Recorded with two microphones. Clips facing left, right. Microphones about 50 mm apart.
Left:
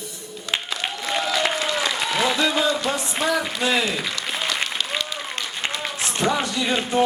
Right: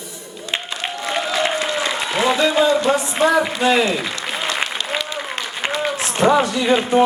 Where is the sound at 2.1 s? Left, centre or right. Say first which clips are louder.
Right 6 dB; right.